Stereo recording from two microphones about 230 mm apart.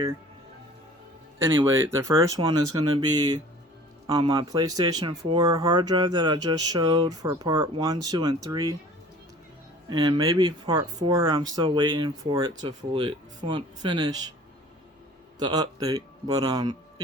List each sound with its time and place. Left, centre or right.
1.5 s speech: centre
9.9 s speech: centre
15.4 s speech: centre